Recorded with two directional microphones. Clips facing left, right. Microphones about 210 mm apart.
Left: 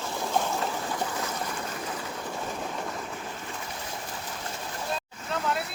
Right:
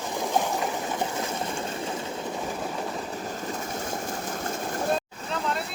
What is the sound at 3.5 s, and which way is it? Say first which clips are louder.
Vehicle: right 6 dB; 45° right (ahead or behind).